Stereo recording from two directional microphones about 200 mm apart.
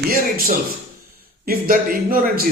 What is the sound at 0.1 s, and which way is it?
A man's voice, 45° right (ahead or behind).